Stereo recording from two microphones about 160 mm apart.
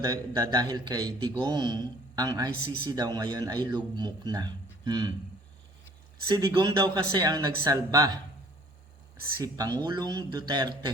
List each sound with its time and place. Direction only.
0.0 s a man's voice: 25° right (ahead or behind)
6.2 s a man's voice: 25° right (ahead or behind)
9.4 s a man's voice: 25° right (ahead or behind)